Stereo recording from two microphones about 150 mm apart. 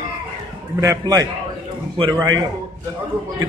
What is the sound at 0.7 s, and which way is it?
A man's voice, 20° right (ahead or behind).